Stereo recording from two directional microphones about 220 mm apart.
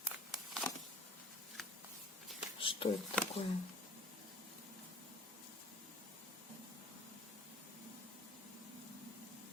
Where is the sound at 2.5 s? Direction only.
25° left (ahead or behind).